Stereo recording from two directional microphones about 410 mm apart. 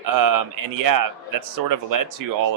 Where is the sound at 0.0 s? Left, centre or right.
Right.